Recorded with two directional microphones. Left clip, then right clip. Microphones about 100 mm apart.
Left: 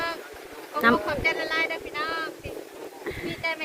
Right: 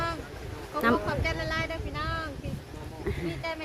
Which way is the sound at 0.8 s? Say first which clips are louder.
Left 5 dB; 25° right (ahead or behind).